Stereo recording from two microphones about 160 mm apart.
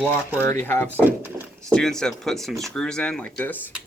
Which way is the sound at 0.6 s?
10° left (ahead or behind).